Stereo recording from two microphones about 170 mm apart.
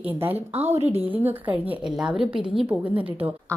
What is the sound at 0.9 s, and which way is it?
A woman's voice, 10° right (ahead or behind).